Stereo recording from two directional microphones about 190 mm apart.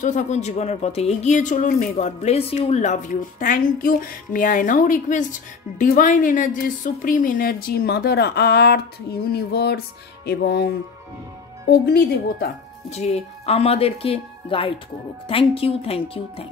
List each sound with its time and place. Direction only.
0.0 s a woman's voice: 40° left (ahead or behind); by 10.7 s 55° left (ahead or behind)
11.7 s speech: 60° left (ahead or behind)
12.9 s a woman's voice: 35° left (ahead or behind)